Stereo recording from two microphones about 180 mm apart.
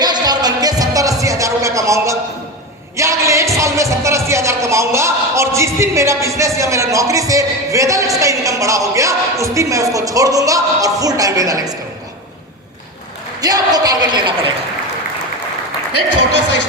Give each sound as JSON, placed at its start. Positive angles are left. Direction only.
{"t": 0.0, "sound": "music", "side_deg": -20}
{"t": 4.3, "sound": "speech", "side_deg": -15}
{"t": 13.4, "sound": "speech", "side_deg": -20}